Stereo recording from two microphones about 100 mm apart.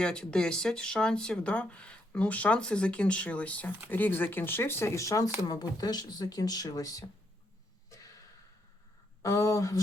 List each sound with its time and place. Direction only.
0.0 s speech: 10° left (ahead or behind); by 7.0 s 40° left (ahead or behind)
9.2 s speech: 30° left (ahead or behind)